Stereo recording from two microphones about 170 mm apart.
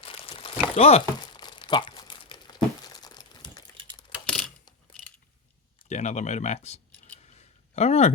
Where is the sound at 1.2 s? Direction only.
25° left (ahead or behind).